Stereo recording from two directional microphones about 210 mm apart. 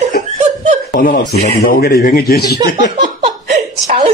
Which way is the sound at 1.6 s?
45° left (ahead or behind).